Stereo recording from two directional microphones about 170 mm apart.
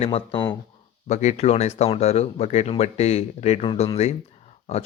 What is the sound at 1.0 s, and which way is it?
Speech, 45° left (ahead or behind).